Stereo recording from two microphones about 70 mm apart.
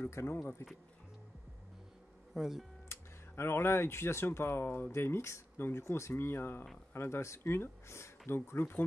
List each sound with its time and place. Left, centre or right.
0.1 s speech: left
2.3 s speech: centre
2.9 s speech: left